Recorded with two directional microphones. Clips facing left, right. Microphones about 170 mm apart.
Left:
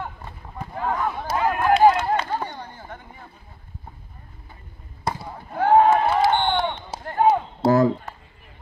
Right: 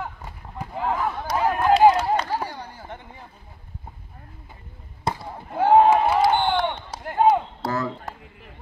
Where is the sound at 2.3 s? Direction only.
5° right (ahead or behind).